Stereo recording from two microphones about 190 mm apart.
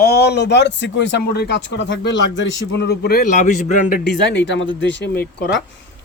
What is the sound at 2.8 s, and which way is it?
A man's voice, 55° left (ahead or behind).